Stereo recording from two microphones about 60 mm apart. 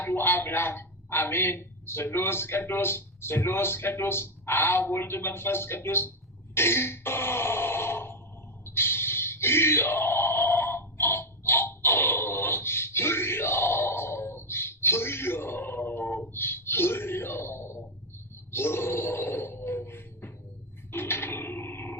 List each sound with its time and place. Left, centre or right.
0.0 s a man's voice: left
6.5 s throat clearing: left
8.6 s a sound: left